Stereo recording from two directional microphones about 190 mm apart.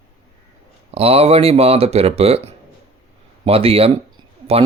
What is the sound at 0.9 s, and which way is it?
Speech, 30° right (ahead or behind).